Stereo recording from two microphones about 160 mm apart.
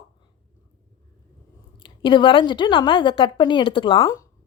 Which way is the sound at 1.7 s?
30° left (ahead or behind).